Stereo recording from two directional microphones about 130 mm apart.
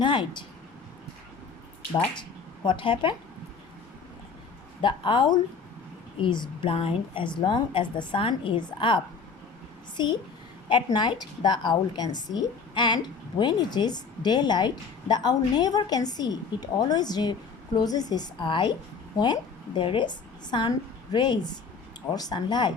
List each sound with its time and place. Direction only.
0.0 s speech: 35° left (ahead or behind)
2.6 s a woman's voice: 40° left (ahead or behind)
4.8 s a woman's voice: 40° left (ahead or behind)
10.0 s a woman's voice: 35° left (ahead or behind)